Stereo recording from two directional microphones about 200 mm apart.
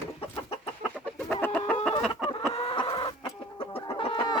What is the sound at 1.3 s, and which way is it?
Chicken, 10° left (ahead or behind).